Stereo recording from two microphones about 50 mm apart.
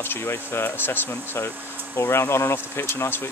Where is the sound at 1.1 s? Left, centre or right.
Left.